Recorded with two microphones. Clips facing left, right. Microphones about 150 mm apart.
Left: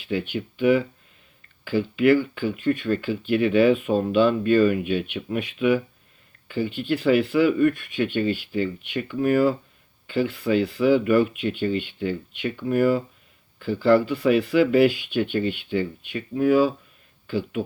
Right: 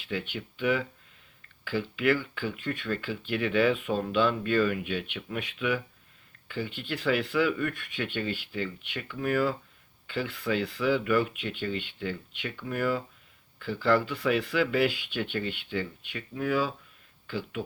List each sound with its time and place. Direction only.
0.0 s speech: 15° left (ahead or behind)
10.5 s speech: 25° left (ahead or behind)
10.8 s speech: 15° left (ahead or behind)